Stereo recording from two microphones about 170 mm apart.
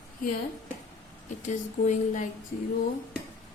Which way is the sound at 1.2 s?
45° left (ahead or behind).